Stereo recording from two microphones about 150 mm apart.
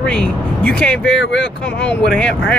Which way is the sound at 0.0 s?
5° left (ahead or behind).